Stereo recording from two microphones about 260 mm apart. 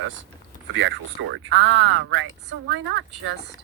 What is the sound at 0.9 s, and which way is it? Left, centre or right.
Speech, right.